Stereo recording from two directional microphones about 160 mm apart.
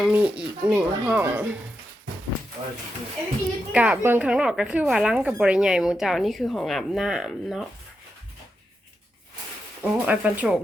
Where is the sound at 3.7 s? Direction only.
10° right (ahead or behind).